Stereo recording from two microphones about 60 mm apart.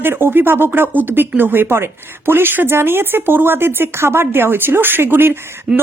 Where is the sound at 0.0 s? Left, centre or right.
Right.